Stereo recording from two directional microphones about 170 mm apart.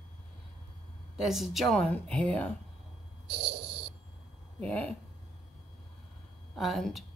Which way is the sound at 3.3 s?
80° right.